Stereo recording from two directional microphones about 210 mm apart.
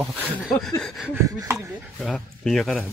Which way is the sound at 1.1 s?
15° right (ahead or behind).